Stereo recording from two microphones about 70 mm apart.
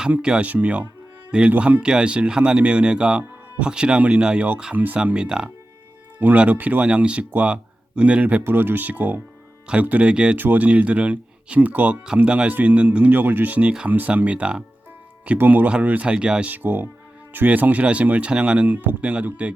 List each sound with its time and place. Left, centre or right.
0.2 s speech: centre
5.1 s speech: centre
8.4 s speech: right; by 10.3 s centre
10.3 s speech: right
15.4 s speech: right
16.5 s speech: right